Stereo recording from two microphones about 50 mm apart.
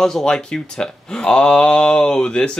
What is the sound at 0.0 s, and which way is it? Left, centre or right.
Speech, centre.